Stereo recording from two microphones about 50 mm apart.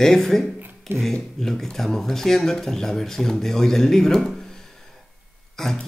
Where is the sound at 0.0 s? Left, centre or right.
Centre.